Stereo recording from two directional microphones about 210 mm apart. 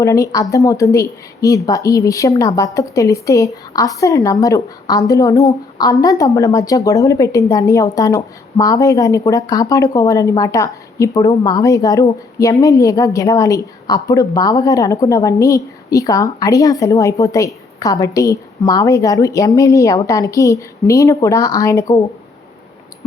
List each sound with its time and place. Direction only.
0.0 s speech: 15° left (ahead or behind)